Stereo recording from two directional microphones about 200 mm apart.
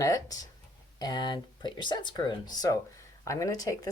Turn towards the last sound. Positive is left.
turn(degrees=15)  # may be behind; listen again after turning